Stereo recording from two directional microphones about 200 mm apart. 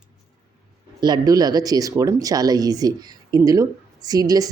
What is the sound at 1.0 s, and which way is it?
Speech, 20° right (ahead or behind).